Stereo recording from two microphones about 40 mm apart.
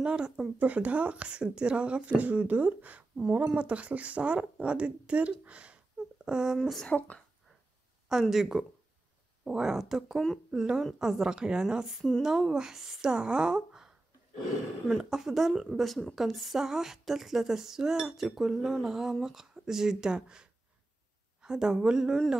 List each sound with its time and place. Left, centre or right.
0.0 s speech: right
0.6 s speech: right
3.3 s speech: right
6.2 s speech: centre
6.9 s speech: left
8.1 s speech: centre
10.1 s speech: centre
10.5 s a woman's voice: centre
15.0 s speech: centre
15.8 s a woman's voice: centre